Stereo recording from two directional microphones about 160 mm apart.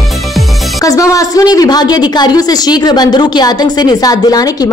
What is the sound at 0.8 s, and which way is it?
Speech, 20° left (ahead or behind).